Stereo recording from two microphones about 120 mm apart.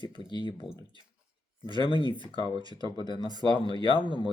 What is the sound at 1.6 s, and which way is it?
Speech, 40° right (ahead or behind).